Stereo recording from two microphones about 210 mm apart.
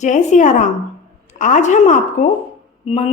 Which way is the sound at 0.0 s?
35° left (ahead or behind).